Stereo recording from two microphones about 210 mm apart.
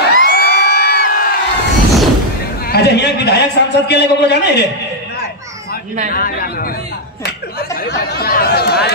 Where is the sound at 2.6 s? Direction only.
50° left (ahead or behind).